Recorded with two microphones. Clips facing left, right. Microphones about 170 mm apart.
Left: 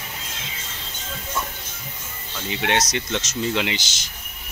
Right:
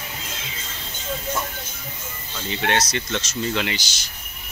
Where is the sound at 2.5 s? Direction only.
15° left (ahead or behind).